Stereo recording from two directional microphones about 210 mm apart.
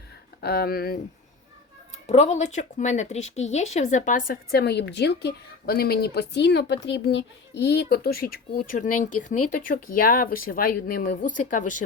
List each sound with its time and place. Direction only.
0.4 s speech: 50° left (ahead or behind)
2.0 s speech: 30° left (ahead or behind)